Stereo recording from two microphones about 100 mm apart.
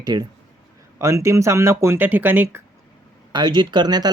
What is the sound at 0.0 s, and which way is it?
Speech, 45° right (ahead or behind).